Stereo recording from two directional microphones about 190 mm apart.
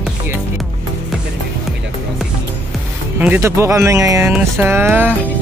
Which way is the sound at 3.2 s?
10° right (ahead or behind).